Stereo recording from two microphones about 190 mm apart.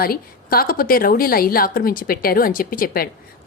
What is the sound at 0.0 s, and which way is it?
A woman's voice, 50° left (ahead or behind).